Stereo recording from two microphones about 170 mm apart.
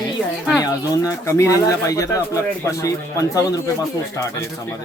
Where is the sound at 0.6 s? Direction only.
20° left (ahead or behind).